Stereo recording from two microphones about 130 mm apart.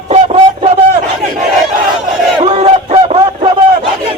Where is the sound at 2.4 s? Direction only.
45° right (ahead or behind).